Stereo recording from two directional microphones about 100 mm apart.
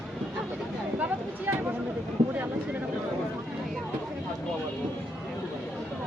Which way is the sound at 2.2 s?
80° right.